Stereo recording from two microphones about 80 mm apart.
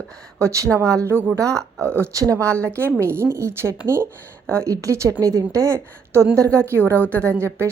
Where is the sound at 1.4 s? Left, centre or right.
Right.